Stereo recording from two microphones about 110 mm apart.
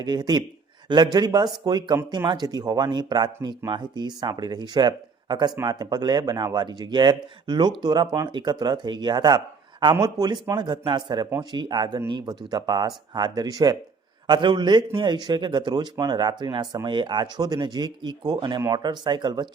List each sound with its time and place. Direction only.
0.0 s a man's voice: 40° right (ahead or behind)